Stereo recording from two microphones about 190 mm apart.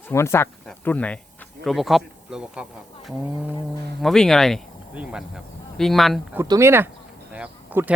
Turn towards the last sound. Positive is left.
turn(degrees=-10)  # may be behind; listen again after turning